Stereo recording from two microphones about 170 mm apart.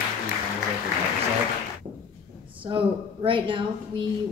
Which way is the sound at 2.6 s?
30° right (ahead or behind).